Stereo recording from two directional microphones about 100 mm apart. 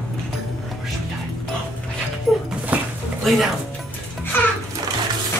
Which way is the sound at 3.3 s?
Centre (ahead or behind).